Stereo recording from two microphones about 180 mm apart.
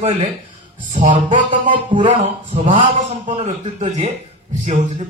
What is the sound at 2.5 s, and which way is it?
Speech, 30° right (ahead or behind).